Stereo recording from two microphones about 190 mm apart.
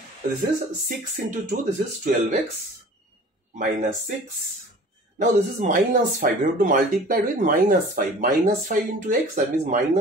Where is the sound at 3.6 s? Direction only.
45° right (ahead or behind).